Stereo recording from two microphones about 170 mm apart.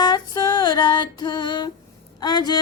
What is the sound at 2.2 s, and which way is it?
Speech, 25° left (ahead or behind).